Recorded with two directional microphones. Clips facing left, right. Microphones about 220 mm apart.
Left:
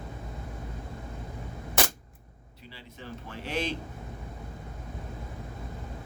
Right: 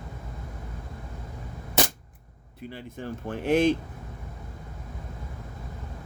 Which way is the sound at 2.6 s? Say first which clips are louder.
Right 9 dB; 50° right (ahead or behind).